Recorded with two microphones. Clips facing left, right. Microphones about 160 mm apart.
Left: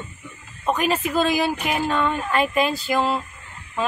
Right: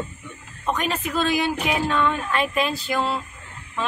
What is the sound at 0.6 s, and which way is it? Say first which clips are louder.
A woman's voice: left 3 dB; 5° left (ahead or behind).